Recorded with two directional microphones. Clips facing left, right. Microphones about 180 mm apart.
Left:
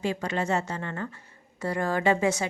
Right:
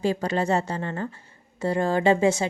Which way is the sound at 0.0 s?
35° right (ahead or behind).